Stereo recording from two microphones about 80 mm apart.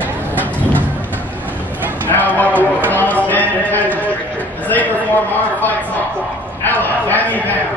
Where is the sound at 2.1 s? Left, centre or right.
Left.